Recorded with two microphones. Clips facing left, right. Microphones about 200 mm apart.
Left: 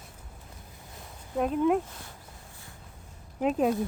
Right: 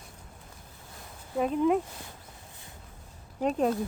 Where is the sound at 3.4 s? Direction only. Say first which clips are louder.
Left 1 dB; 5° left (ahead or behind).